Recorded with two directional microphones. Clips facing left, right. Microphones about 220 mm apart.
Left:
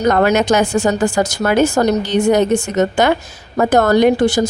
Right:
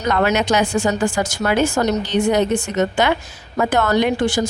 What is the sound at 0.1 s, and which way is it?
A woman's voice, 45° left (ahead or behind).